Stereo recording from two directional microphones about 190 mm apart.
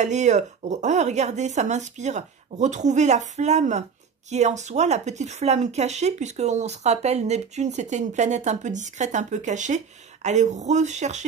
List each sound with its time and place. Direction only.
0.0 s speech: 40° right (ahead or behind)